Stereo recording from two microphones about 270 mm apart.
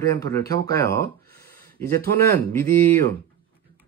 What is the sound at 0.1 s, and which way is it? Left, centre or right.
Speech, centre.